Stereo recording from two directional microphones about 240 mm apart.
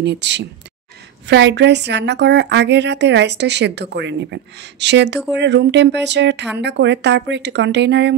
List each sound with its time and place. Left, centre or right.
0.0 s a woman's voice: right